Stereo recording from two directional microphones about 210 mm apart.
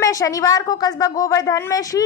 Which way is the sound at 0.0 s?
15° left (ahead or behind).